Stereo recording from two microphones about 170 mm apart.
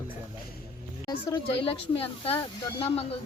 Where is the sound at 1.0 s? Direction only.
25° left (ahead or behind).